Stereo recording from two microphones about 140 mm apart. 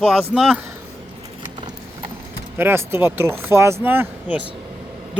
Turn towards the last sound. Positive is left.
turn(degrees=-15)  # may be behind; listen again after turning